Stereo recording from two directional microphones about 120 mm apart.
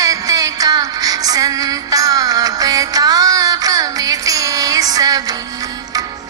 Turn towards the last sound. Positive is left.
turn(degrees=-30)  # may be behind; listen again after turning